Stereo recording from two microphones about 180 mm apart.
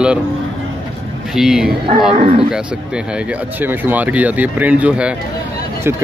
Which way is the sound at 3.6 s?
10° right (ahead or behind).